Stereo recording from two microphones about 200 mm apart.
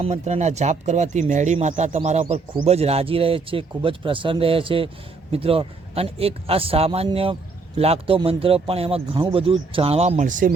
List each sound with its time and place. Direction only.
0.0 s speech: 35° right (ahead or behind)